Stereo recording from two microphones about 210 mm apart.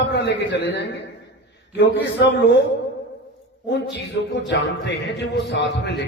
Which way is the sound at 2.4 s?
55° left (ahead or behind).